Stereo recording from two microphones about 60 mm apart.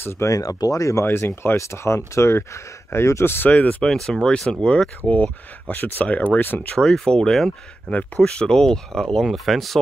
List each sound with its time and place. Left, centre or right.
0.3 s speech: left
1.0 s speech: left
3.4 s speech: left
3.8 s speech: centre; by 6.6 s left
6.6 s speech: centre
7.9 s speech: left; by 9.8 s centre